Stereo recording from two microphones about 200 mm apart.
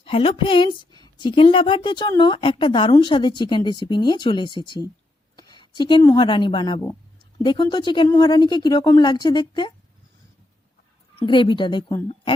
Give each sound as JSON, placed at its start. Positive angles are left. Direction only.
{"t": 0.0, "sound": "speech", "side_deg": 30}
{"t": 5.4, "sound": "a sound", "side_deg": 20}
{"t": 6.1, "sound": "speech", "side_deg": 25}
{"t": 11.3, "sound": "speech", "side_deg": 25}